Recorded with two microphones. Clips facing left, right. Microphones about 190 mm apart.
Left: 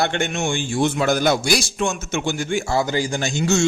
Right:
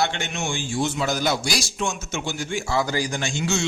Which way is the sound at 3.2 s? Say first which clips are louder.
Left 6 dB; 45° left (ahead or behind).